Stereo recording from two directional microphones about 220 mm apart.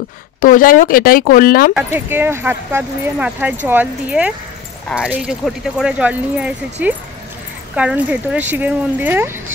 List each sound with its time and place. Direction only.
0.4 s speech: 40° left (ahead or behind)
2.0 s speech: 10° right (ahead or behind)